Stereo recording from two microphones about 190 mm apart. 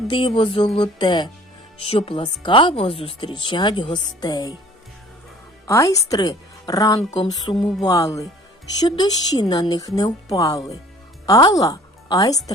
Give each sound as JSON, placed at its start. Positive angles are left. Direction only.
{"t": 0.1, "sound": "speech", "side_deg": 25}
{"t": 5.6, "sound": "a woman's voice", "side_deg": 15}